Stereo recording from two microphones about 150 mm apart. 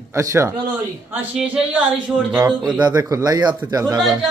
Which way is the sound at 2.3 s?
20° right (ahead or behind).